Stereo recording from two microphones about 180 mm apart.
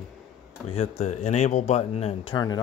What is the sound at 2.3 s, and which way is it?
Speech, 20° left (ahead or behind).